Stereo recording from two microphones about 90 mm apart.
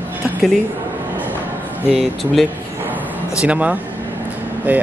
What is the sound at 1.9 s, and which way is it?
Speech, centre (ahead or behind).